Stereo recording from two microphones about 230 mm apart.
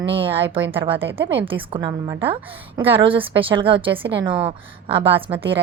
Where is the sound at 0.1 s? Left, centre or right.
Right.